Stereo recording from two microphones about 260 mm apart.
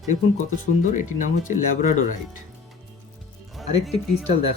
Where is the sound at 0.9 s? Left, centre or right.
Left.